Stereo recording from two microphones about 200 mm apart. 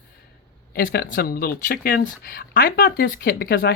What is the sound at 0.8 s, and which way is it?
Speech, 45° left (ahead or behind).